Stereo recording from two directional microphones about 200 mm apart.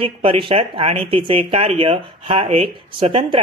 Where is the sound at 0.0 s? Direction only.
25° right (ahead or behind).